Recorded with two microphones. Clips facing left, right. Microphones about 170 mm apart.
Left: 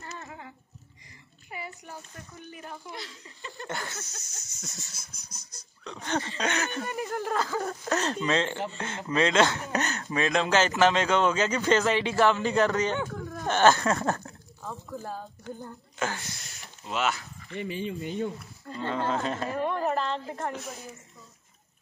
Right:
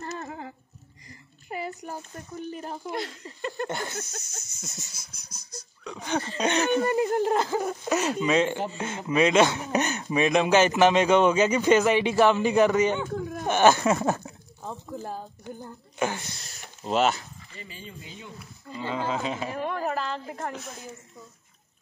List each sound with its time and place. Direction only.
0.0 s a sound: 40° right (ahead or behind)
1.5 s speech: 40° right (ahead or behind)
2.9 s speech: 55° right (ahead or behind)
3.6 s speech: 20° right (ahead or behind)
5.9 s speech: 5° right (ahead or behind)
6.4 s speech: 20° right (ahead or behind)
7.6 s speech: 10° right (ahead or behind)
14.6 s speech: 20° right (ahead or behind)
16.8 s speech: 35° right (ahead or behind)
17.5 s speech: 65° left (ahead or behind)
18.7 s speech: 5° right (ahead or behind)